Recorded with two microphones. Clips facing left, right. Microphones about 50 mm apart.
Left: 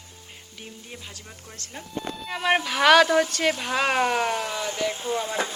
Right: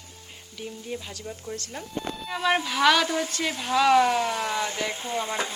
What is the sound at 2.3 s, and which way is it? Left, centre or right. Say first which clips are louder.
Speech: left 1 dB; left.